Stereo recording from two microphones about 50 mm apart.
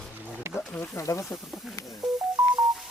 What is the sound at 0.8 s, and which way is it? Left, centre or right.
Speech, left.